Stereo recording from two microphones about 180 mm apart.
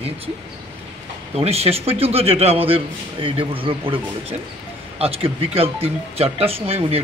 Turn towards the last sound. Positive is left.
turn(degrees=-35)  # may be behind; listen again after turning